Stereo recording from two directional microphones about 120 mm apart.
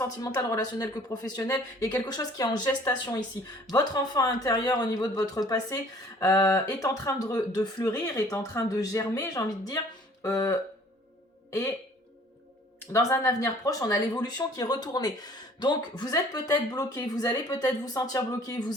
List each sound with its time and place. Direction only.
0.5 s speech: 30° left (ahead or behind)
2.0 s speech: 35° left (ahead or behind)
12.9 s speech: 30° left (ahead or behind)